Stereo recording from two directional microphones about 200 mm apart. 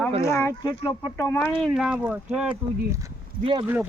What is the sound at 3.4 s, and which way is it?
Speech, 25° right (ahead or behind).